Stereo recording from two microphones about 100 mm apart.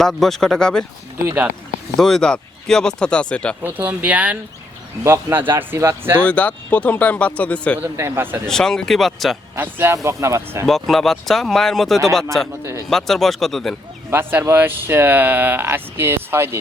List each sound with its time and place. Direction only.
0.0 s speech: 5° left (ahead or behind)
2.0 s a man's voice: 5° left (ahead or behind)
3.6 s speech: 15° right (ahead or behind)
5.0 s speech: 25° right (ahead or behind)
6.2 s a man's voice: 15° left (ahead or behind)
7.8 s speech: 25° right (ahead or behind)
8.4 s speech: 5° left (ahead or behind)
9.6 s speech: 25° right (ahead or behind)
10.7 s speech: centre (ahead or behind)
14.1 s speech: 20° right (ahead or behind)